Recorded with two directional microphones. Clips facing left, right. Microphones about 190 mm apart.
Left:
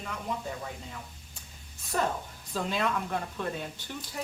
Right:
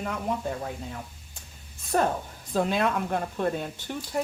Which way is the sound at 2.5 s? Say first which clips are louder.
Right 5 dB; 55° right (ahead or behind).